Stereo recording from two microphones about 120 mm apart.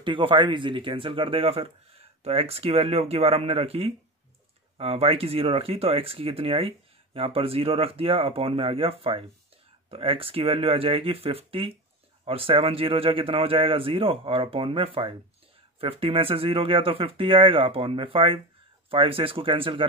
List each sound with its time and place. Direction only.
0.0 s speech: 45° right (ahead or behind)